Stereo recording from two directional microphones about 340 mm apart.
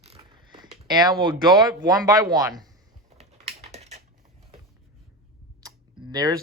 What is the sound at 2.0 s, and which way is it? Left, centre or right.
Speech, centre.